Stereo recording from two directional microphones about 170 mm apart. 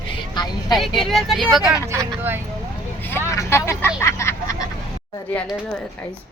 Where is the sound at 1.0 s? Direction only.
Centre (ahead or behind).